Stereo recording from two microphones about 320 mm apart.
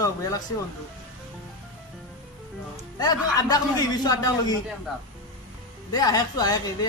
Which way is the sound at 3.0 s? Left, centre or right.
Centre.